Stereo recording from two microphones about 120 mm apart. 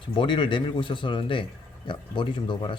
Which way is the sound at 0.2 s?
45° left (ahead or behind).